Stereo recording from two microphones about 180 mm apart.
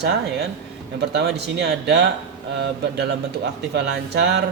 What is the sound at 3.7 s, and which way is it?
Speech, 70° right (ahead or behind).